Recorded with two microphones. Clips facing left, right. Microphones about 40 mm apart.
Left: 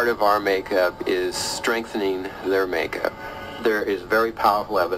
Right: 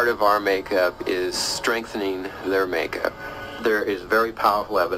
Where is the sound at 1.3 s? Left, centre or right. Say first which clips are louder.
Even; left.